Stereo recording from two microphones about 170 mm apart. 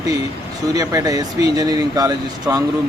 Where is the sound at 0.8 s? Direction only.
20° right (ahead or behind).